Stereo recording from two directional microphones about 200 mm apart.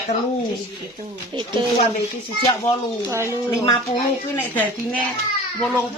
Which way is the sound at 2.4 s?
15° left (ahead or behind).